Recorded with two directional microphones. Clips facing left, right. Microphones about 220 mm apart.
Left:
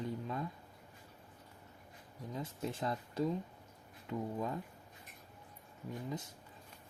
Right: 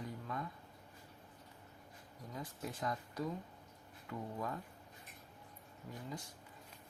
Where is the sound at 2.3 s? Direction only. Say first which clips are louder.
Left 5 dB; 25° left (ahead or behind).